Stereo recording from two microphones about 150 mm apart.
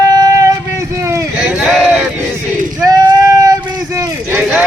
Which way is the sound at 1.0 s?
20° right (ahead or behind).